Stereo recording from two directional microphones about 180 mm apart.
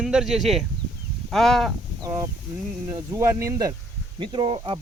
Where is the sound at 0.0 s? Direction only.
5° right (ahead or behind).